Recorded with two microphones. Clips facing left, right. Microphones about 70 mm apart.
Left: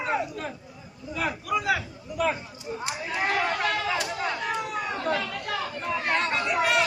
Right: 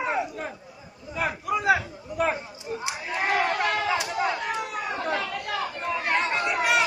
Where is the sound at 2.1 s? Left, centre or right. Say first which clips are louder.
Right 2 dB; right.